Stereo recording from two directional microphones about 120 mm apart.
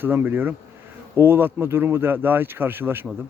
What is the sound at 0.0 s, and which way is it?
Speech, 20° right (ahead or behind).